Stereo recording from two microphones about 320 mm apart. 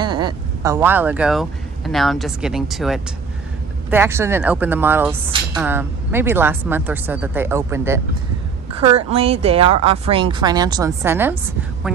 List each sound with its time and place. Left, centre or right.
0.0 s speech: centre